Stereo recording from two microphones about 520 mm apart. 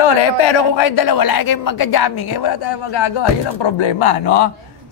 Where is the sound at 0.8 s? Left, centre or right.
Left.